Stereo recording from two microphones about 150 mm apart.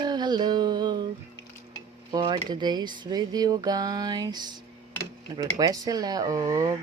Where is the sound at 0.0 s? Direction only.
30° right (ahead or behind).